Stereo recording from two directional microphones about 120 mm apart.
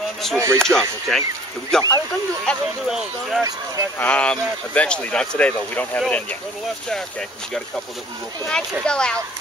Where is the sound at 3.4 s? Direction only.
30° right (ahead or behind).